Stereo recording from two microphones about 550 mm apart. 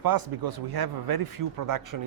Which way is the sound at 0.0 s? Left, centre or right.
Right.